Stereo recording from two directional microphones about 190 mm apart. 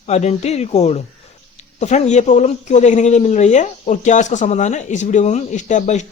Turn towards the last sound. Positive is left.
turn(degrees=40)  # may be behind; listen again after turning